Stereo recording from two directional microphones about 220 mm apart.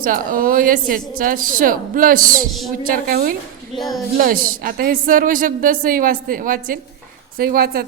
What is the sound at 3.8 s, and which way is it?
Speech, centre (ahead or behind).